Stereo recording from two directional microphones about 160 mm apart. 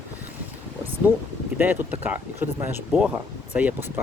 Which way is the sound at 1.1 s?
10° right (ahead or behind).